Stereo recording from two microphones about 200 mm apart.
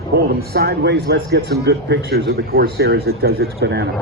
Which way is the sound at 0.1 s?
50° right (ahead or behind).